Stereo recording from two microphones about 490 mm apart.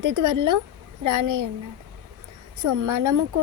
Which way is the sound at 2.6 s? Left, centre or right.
Right.